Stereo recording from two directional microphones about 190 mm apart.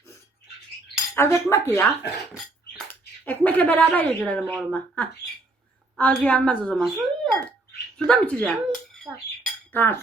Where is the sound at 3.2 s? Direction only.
10° left (ahead or behind).